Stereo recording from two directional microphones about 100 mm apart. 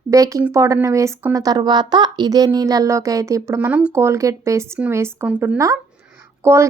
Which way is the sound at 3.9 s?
30° right (ahead or behind).